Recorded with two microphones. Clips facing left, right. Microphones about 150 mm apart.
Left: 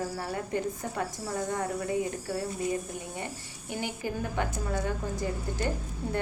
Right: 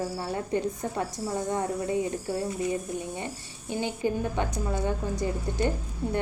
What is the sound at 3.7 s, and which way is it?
A woman's voice, 20° right (ahead or behind).